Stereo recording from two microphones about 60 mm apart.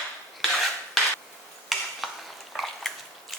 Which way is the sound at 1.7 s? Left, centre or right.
Centre.